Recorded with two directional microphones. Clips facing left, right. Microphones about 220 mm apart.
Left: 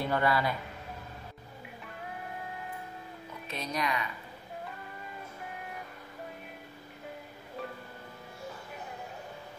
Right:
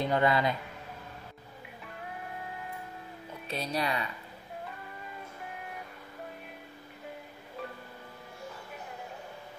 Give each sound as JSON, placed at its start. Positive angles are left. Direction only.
{"t": 0.0, "sound": "speech", "side_deg": -20}
{"t": 1.9, "sound": "music", "side_deg": 0}
{"t": 3.4, "sound": "speech", "side_deg": -30}
{"t": 4.6, "sound": "music", "side_deg": 0}